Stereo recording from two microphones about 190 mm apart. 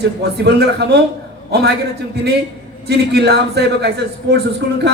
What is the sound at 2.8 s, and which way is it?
A man's voice, 60° right (ahead or behind).